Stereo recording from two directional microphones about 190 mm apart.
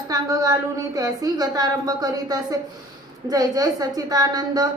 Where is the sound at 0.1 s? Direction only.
15° right (ahead or behind).